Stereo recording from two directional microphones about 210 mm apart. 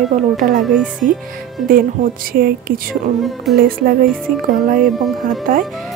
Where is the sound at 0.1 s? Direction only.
35° right (ahead or behind).